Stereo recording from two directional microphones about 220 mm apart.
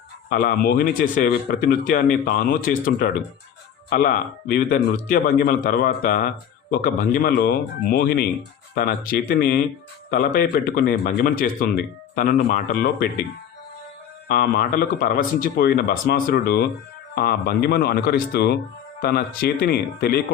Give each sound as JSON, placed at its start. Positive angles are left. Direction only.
{"t": 0.3, "sound": "a man's voice", "side_deg": 45}
{"t": 14.3, "sound": "speech", "side_deg": 45}